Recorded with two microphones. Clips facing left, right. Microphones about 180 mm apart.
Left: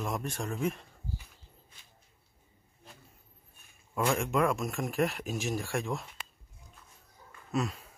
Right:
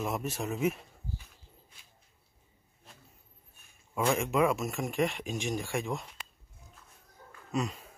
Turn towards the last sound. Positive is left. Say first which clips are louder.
# left 1 dB
turn(degrees=0)  # may be behind; listen again after turning